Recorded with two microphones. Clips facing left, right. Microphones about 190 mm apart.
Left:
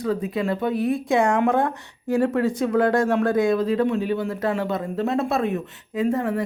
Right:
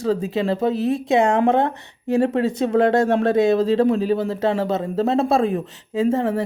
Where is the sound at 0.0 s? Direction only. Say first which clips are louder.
Right 3 dB; 25° right (ahead or behind).